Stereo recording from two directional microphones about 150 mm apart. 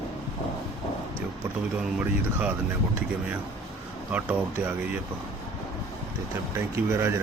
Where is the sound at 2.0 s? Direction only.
10° right (ahead or behind).